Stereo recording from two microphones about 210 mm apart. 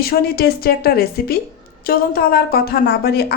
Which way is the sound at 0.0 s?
45° left (ahead or behind).